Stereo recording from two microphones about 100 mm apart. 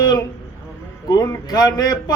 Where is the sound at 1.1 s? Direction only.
40° left (ahead or behind).